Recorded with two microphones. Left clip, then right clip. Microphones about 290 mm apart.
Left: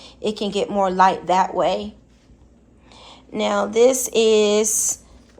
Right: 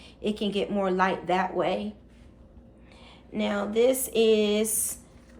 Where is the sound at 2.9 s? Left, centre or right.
Centre.